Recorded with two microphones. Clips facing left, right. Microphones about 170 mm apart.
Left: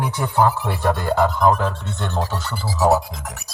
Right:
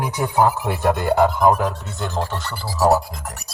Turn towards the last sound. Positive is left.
turn(degrees=0)  # may be behind; listen again after turning